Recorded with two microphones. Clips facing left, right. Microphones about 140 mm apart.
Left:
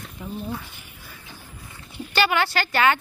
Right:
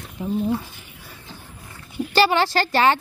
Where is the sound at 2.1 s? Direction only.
35° right (ahead or behind).